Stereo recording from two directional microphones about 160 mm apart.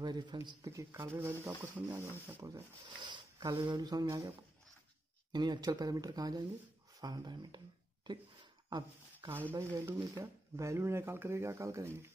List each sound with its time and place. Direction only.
0.0 s speech: 25° right (ahead or behind)
5.3 s speech: 25° right (ahead or behind)
8.6 s speech: 25° right (ahead or behind)
9.3 s speech: 10° right (ahead or behind)